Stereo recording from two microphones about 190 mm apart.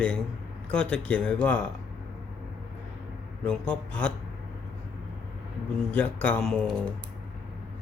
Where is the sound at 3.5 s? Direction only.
5° left (ahead or behind).